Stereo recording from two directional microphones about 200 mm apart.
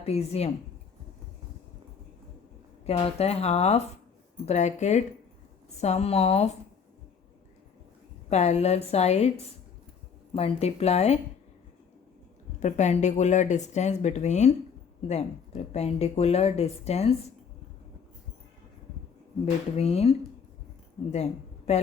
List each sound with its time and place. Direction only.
0.0 s speech: 30° left (ahead or behind)
2.8 s speech: 30° left (ahead or behind)
8.3 s speech: 35° left (ahead or behind)
10.3 s speech: 30° left (ahead or behind)
12.5 s speech: 35° left (ahead or behind)
19.7 s speech: 30° left (ahead or behind)